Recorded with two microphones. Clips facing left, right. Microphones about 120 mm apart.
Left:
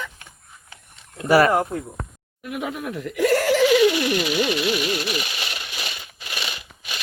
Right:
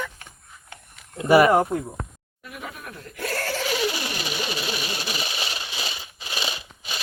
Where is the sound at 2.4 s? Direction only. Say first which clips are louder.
Left 9 dB; 75° left (ahead or behind); by 3.6 s 90° left.